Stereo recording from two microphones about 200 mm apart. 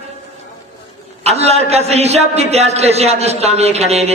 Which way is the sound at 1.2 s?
30° right (ahead or behind).